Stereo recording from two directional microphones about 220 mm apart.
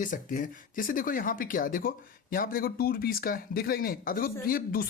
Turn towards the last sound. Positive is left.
turn(degrees=40)  # may be behind; listen again after turning